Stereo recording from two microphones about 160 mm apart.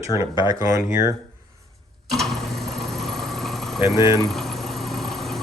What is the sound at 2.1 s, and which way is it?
Engine, centre (ahead or behind).